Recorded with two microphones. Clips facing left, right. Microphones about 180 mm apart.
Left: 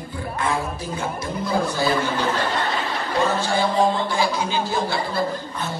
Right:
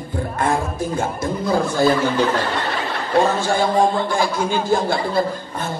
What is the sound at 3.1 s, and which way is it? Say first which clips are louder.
A man's voice: right 5 dB; 50° right (ahead or behind).